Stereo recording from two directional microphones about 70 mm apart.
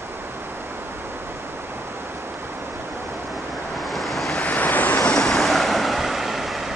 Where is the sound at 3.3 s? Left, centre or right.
Centre.